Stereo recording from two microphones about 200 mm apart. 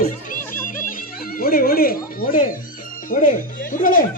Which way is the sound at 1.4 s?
45° left (ahead or behind).